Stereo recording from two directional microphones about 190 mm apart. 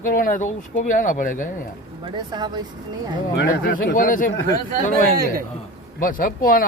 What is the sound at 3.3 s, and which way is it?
Speech, 50° left (ahead or behind).